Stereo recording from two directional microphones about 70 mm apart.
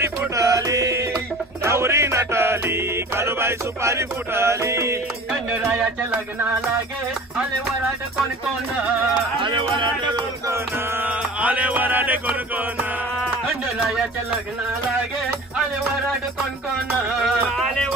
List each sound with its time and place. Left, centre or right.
0.4 s music: right
5.7 s a sound: right
9.8 s music: right
11.0 s music: right
17.1 s music: centre